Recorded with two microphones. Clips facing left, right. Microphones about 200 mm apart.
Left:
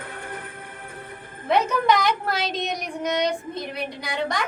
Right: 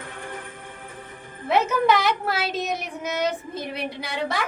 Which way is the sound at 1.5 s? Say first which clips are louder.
Even; 5° right (ahead or behind).